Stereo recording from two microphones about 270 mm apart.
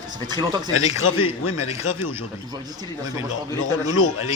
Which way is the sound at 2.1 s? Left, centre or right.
Centre.